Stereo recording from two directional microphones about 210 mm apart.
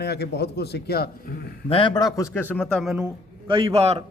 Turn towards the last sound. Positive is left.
turn(degrees=-30)  # may be behind; listen again after turning